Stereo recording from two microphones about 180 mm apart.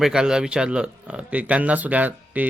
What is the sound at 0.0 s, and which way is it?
Speech, 5° right (ahead or behind).